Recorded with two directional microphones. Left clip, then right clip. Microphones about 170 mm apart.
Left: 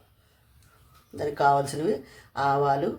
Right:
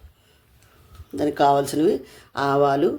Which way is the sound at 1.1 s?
55° right (ahead or behind).